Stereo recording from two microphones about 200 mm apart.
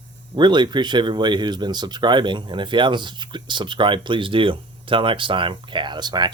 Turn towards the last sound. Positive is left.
turn(degrees=-20)  # may be behind; listen again after turning